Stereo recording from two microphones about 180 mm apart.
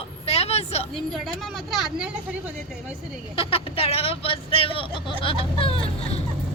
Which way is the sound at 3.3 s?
30° left (ahead or behind).